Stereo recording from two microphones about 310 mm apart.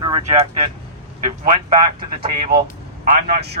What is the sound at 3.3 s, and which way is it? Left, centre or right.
Speech, right.